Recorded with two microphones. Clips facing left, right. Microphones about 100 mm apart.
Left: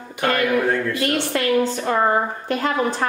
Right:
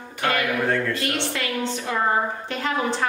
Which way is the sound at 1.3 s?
45° left (ahead or behind).